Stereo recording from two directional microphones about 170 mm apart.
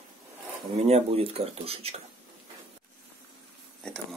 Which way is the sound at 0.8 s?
35° right (ahead or behind).